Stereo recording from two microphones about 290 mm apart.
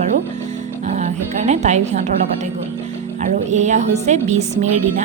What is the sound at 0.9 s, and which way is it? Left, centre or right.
Speech, right.